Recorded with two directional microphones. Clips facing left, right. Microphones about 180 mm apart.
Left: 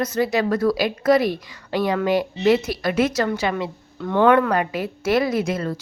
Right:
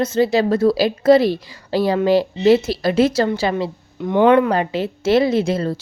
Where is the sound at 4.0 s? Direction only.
20° right (ahead or behind).